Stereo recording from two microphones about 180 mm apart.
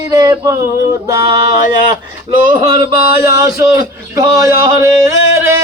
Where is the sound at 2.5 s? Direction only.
20° right (ahead or behind).